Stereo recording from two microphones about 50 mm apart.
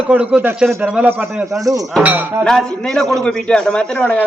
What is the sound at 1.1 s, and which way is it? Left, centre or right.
Speech, right.